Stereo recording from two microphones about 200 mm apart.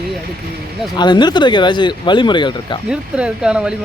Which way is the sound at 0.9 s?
20° left (ahead or behind).